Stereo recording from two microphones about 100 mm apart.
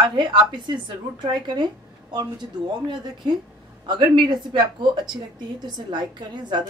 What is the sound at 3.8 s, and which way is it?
A woman's voice, 50° right (ahead or behind).